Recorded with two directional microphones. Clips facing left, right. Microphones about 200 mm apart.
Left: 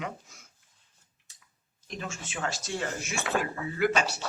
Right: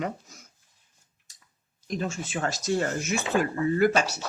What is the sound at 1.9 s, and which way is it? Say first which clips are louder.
Speech: right 8 dB; 35° right (ahead or behind).